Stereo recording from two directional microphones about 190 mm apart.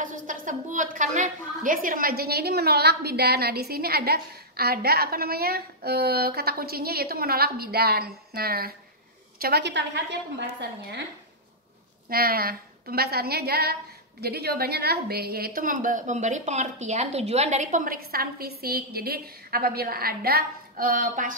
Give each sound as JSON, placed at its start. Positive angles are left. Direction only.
{"t": 0.0, "sound": "a woman's voice", "side_deg": -45}
{"t": 12.1, "sound": "a woman's voice", "side_deg": -50}